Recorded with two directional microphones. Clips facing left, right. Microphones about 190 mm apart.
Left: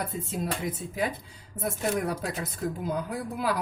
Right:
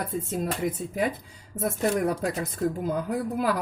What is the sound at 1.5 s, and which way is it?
Speech, 45° right (ahead or behind).